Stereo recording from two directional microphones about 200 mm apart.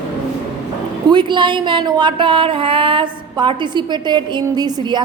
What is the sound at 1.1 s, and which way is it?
Speech, 25° right (ahead or behind).